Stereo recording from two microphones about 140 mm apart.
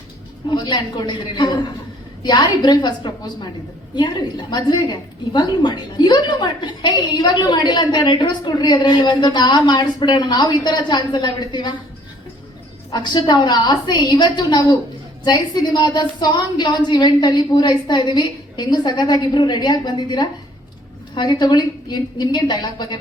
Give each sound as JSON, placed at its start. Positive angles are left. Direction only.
{"t": 0.5, "sound": "a woman's voice", "side_deg": 30}
{"t": 12.9, "sound": "a woman's voice", "side_deg": 30}